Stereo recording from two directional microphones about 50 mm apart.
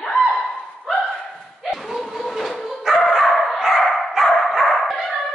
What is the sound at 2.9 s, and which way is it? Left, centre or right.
Dog, centre.